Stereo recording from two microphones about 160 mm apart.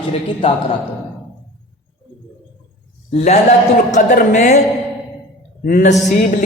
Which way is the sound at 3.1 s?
45° left (ahead or behind).